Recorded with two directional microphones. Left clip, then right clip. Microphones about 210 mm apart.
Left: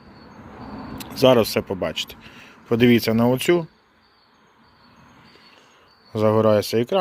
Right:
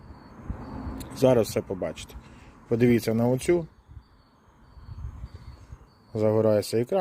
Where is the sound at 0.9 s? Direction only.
10° right (ahead or behind).